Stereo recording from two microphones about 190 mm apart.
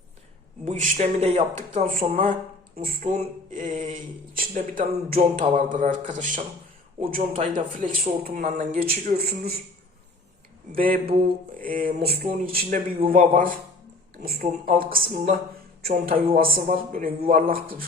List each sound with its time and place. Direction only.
0.6 s speech: 35° right (ahead or behind)
10.8 s speech: 50° right (ahead or behind)